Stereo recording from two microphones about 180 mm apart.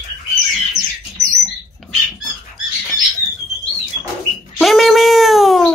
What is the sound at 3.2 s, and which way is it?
Bird, 20° right (ahead or behind).